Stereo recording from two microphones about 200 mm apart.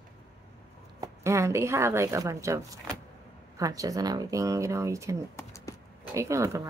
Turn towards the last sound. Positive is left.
turn(degrees=-15)  # may be behind; listen again after turning